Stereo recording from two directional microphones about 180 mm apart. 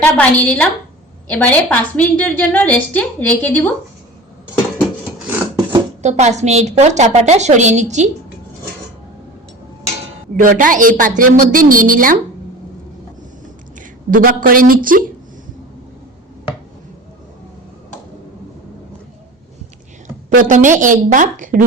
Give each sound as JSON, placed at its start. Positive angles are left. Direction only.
{"t": 0.0, "sound": "a woman's voice", "side_deg": 5}
{"t": 6.0, "sound": "a woman's voice", "side_deg": -40}
{"t": 10.4, "sound": "a woman's voice", "side_deg": -50}
{"t": 13.7, "sound": "a woman's voice", "side_deg": -50}
{"t": 20.3, "sound": "a woman's voice", "side_deg": -45}